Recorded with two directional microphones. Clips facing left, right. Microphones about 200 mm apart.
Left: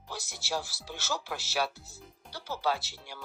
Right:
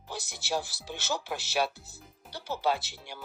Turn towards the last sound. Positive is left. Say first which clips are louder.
# right 2 dB
turn(degrees=-20)  # may be behind; listen again after turning